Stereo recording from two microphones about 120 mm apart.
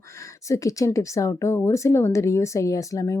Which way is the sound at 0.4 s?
25° left (ahead or behind).